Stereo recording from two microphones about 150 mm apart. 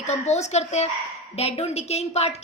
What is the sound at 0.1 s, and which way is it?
A woman's voice, 50° left (ahead or behind).